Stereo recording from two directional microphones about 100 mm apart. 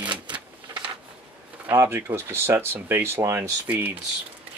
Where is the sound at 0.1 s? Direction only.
50° right (ahead or behind).